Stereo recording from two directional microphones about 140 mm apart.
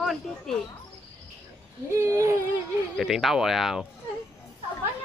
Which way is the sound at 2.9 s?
Centre (ahead or behind).